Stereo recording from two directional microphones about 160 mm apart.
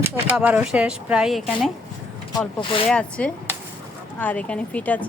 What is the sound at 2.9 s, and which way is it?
Speech, 5° left (ahead or behind).